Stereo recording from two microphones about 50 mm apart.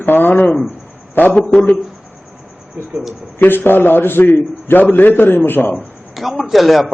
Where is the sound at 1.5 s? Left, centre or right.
Left.